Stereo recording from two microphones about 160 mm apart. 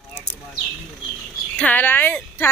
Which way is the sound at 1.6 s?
10° left (ahead or behind).